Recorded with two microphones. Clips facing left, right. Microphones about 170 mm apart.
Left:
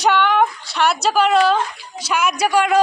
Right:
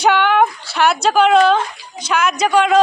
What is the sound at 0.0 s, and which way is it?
A woman's voice, centre (ahead or behind).